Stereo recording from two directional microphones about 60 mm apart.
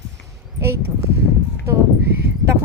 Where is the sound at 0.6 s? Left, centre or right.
Right.